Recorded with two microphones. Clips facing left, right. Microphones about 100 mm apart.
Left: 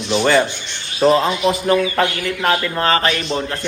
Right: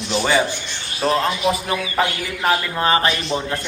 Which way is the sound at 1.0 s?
Centre (ahead or behind).